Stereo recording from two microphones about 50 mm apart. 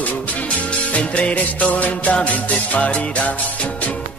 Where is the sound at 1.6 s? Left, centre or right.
Left.